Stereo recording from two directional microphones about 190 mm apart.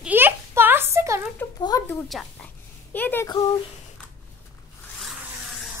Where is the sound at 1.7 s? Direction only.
15° left (ahead or behind).